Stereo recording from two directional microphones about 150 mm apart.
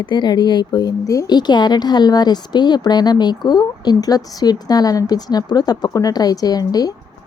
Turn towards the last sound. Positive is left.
turn(degrees=25)  # may be behind; listen again after turning